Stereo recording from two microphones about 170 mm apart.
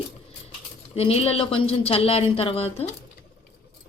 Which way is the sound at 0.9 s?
35° left (ahead or behind).